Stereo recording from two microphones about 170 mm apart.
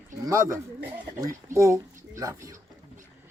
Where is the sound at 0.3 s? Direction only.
20° right (ahead or behind).